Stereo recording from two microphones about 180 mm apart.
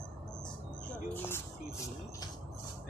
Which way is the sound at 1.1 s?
10° left (ahead or behind).